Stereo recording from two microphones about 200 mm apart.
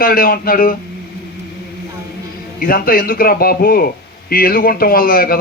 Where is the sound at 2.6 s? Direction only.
45° left (ahead or behind).